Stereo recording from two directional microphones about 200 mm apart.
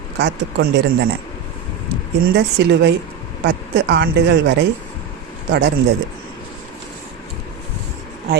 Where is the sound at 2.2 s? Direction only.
60° right (ahead or behind).